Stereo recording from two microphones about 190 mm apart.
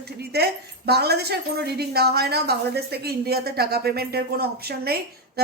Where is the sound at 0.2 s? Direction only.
55° right (ahead or behind).